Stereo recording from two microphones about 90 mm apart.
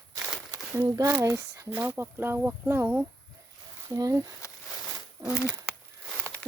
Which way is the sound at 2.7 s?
25° right (ahead or behind).